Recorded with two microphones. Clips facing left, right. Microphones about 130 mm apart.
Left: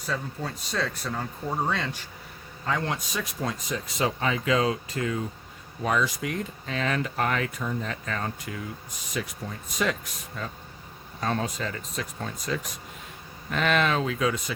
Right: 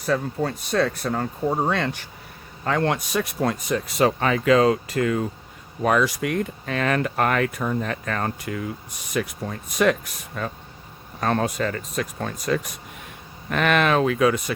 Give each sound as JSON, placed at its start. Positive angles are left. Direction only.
{"t": 0.0, "sound": "speech", "side_deg": -60}